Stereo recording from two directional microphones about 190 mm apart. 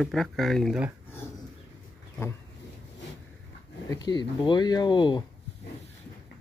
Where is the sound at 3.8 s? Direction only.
20° left (ahead or behind).